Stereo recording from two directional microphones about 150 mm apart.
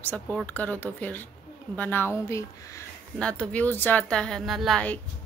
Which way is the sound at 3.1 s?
5° left (ahead or behind).